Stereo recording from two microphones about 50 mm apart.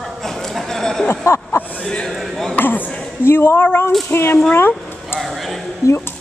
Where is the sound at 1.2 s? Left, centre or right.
Left.